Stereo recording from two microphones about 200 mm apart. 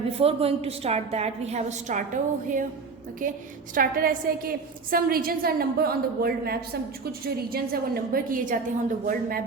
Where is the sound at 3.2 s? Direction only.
40° right (ahead or behind).